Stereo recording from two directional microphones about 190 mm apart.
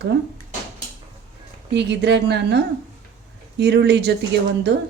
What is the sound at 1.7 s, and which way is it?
Speech, 65° right (ahead or behind).